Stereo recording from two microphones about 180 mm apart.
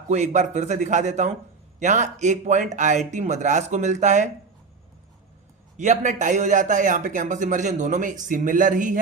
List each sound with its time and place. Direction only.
0.1 s speech: 40° right (ahead or behind)
5.7 s speech: 40° right (ahead or behind)